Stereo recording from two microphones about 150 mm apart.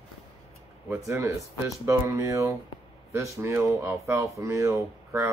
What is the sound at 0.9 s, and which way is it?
Speech, 20° right (ahead or behind).